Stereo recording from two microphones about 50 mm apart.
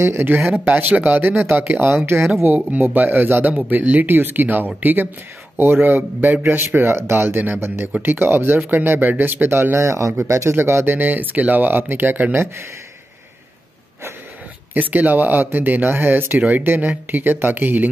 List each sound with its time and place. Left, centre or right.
0.5 s speech: right
1.4 s speech: right
2.4 s speech: right
3.7 s speech: right
4.1 s speech: right
9.8 s speech: right
11.0 s speech: right
14.7 s speech: right